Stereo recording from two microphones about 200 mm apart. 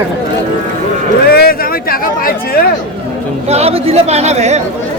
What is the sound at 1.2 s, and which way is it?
A man's voice, 50° left (ahead or behind).